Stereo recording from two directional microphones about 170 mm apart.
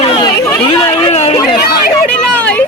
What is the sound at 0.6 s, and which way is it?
Speech, 30° left (ahead or behind).